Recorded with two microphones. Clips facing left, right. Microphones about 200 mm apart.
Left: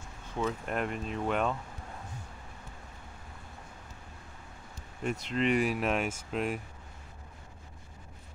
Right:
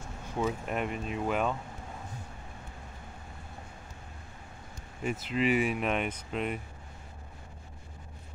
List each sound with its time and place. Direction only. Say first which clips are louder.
0.4 s speech: right 1 dB; 5° right (ahead or behind)
5.0 s speech: right 1 dB; 5° right (ahead or behind)